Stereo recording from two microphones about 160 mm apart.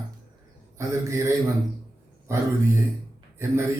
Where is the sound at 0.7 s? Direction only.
20° right (ahead or behind).